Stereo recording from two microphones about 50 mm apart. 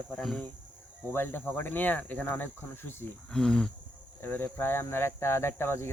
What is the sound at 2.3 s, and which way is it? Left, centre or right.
Speech, left.